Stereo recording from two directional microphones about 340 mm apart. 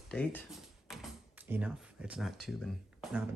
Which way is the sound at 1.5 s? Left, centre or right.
Centre.